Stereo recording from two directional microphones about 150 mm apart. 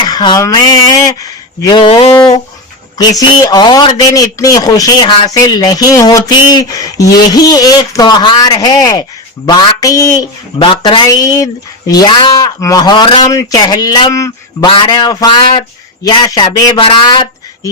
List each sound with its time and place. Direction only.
0.0 s speech: 30° left (ahead or behind)
3.0 s a man's voice: 25° left (ahead or behind)
10.6 s a man's voice: 35° left (ahead or behind)
14.7 s a man's voice: 30° left (ahead or behind)